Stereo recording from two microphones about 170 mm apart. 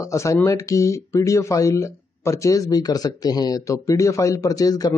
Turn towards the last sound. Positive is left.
turn(degrees=20)  # may be behind; listen again after turning